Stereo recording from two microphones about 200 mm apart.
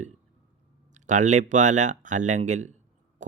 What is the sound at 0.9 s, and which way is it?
Speech, 40° right (ahead or behind).